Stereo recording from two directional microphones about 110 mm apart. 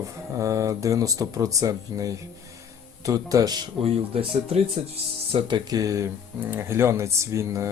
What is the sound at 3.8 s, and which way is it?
Speech, 60° right (ahead or behind).